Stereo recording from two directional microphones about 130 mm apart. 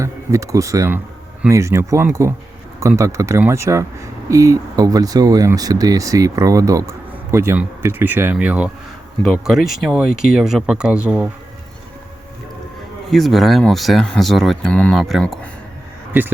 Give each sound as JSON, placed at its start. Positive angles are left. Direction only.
{"t": 0.0, "sound": "speech", "side_deg": -25}
{"t": 9.2, "sound": "speech", "side_deg": 0}
{"t": 13.1, "sound": "speech", "side_deg": 0}